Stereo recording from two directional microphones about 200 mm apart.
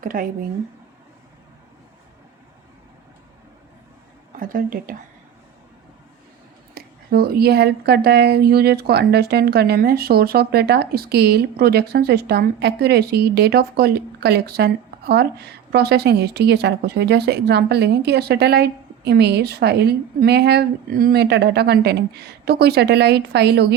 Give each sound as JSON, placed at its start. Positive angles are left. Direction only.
{"t": 0.0, "sound": "a woman's voice", "side_deg": -45}
{"t": 4.3, "sound": "a woman's voice", "side_deg": -45}
{"t": 6.7, "sound": "a woman's voice", "side_deg": -50}